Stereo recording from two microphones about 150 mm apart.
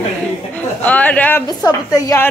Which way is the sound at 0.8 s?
10° left (ahead or behind).